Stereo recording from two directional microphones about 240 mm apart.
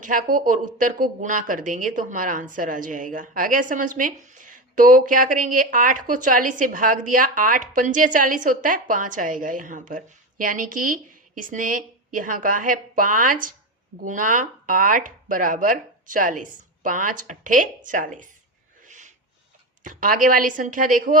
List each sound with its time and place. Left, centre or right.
0.0 s a woman's voice: right
18.8 s a sound: right
19.8 s a woman's voice: right